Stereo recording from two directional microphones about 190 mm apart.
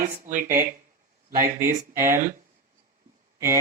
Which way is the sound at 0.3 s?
10° right (ahead or behind).